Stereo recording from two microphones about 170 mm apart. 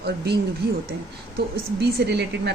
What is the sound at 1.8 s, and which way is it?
Speech, 80° right.